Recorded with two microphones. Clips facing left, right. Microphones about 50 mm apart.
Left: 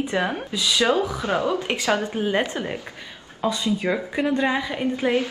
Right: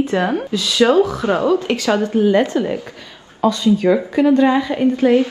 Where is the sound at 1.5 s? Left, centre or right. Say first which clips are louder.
Right 6 dB; left.